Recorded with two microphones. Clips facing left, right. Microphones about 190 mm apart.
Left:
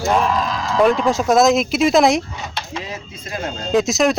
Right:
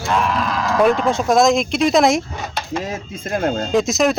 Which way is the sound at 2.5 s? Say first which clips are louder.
Right 6 dB; 45° right (ahead or behind).